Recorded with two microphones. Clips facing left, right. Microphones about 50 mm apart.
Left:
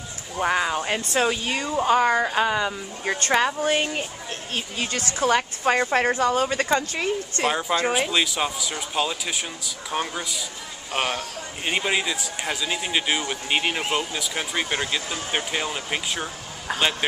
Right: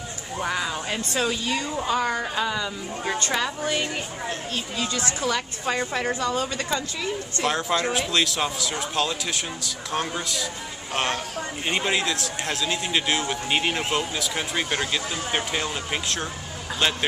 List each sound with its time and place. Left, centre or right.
0.4 s a woman's voice: left
7.4 s a man's voice: centre